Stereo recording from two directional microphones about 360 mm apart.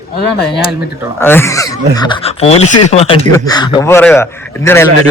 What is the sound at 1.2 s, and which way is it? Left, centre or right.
A man's voice, centre.